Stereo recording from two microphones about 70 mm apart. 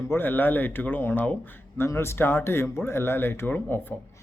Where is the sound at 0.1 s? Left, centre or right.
Left.